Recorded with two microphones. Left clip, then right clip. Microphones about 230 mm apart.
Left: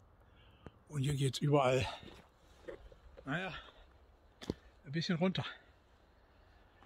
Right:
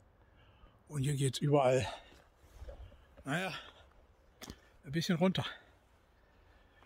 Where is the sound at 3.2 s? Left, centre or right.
Right.